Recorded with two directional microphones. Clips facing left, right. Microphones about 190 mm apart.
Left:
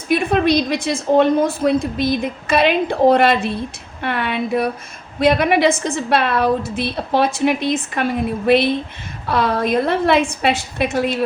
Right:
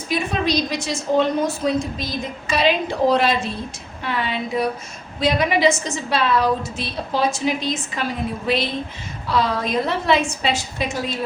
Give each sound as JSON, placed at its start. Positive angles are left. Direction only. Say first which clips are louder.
{"t": 0.1, "sound": "a woman's voice", "louder": "left 6 dB", "side_deg": 55}